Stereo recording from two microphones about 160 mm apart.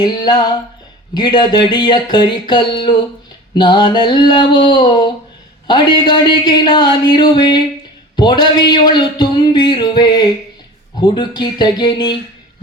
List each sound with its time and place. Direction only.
0.0 s a man's voice: 25° left (ahead or behind)